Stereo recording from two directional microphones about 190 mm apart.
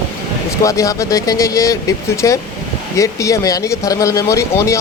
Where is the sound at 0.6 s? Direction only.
15° left (ahead or behind).